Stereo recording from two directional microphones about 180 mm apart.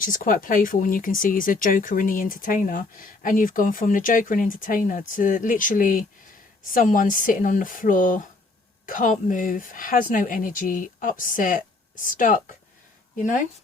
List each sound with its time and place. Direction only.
0.0 s speech: 50° left (ahead or behind)